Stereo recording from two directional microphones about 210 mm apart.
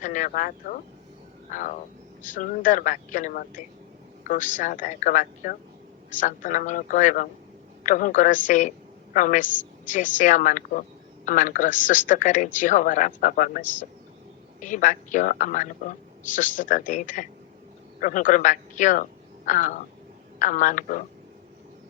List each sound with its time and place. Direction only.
0.0 s a man's voice: 35° left (ahead or behind)